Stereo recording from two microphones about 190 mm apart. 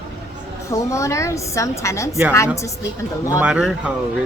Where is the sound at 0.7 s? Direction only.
15° left (ahead or behind).